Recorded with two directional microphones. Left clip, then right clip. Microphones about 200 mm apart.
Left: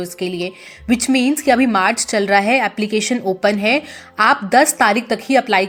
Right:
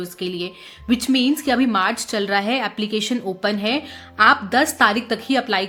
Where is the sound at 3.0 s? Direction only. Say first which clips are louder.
Left 7 dB; 20° left (ahead or behind).